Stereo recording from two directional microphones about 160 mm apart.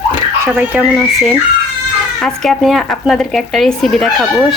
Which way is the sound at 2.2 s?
Centre (ahead or behind).